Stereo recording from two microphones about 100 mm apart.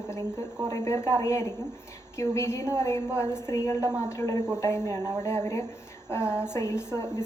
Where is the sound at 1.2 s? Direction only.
30° left (ahead or behind).